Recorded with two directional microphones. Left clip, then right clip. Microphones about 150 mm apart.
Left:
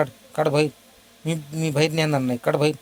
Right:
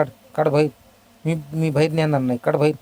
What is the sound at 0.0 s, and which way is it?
A man's voice, 15° right (ahead or behind).